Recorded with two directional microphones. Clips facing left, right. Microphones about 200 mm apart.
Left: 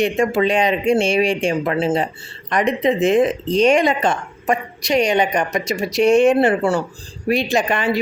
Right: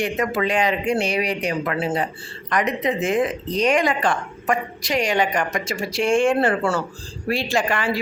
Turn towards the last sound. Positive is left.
turn(degrees=20)  # may be behind; listen again after turning